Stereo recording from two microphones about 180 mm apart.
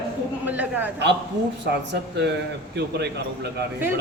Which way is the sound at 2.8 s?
65° right (ahead or behind).